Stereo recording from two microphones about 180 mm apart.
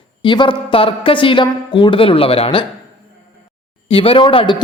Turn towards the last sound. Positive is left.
turn(degrees=25)  # may be behind; listen again after turning